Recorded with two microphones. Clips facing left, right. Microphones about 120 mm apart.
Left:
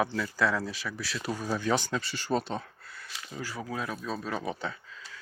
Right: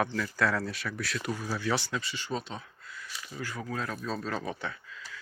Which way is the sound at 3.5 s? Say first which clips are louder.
Even; 20° left (ahead or behind).